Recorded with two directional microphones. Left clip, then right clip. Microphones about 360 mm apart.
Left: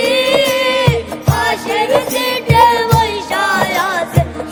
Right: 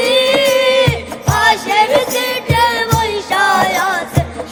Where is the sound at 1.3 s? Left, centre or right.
Centre.